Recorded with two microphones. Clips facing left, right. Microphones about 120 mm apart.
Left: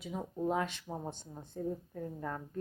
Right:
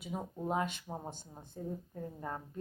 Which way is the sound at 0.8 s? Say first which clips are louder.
Left 2 dB; 10° right (ahead or behind).